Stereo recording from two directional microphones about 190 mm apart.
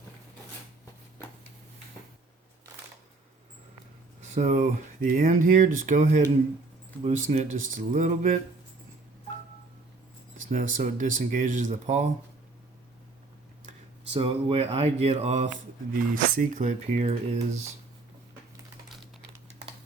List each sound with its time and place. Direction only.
4.2 s speech: 40° right (ahead or behind)
10.3 s speech: 40° right (ahead or behind)
14.1 s speech: 30° right (ahead or behind)